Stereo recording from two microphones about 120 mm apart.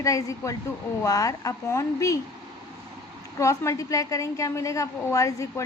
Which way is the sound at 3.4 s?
25° left (ahead or behind).